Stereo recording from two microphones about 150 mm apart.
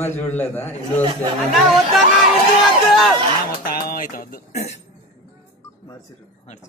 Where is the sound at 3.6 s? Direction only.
75° left (ahead or behind); by 4.8 s 50° left (ahead or behind).